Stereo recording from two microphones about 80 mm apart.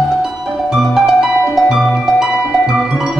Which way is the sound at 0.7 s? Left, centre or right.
Centre.